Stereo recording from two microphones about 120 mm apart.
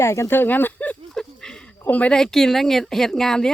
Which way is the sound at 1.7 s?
15° left (ahead or behind).